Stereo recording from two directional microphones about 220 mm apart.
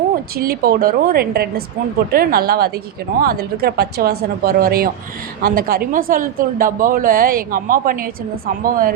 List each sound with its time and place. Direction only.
0.3 s a woman's voice: 45° right (ahead or behind)